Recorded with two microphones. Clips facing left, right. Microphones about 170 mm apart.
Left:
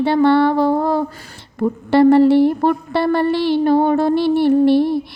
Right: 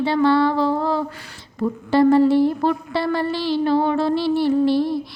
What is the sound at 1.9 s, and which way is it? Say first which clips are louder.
Speech: left 4 dB; 65° left (ahead or behind).